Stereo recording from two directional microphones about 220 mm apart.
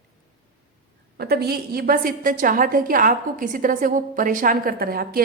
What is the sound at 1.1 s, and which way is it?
A woman's voice, 45° right (ahead or behind).